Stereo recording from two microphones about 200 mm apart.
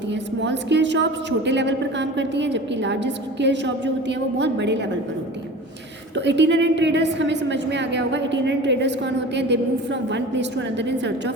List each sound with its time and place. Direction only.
0.1 s a woman's voice: 60° right (ahead or behind)
6.1 s a woman's voice: 60° right (ahead or behind)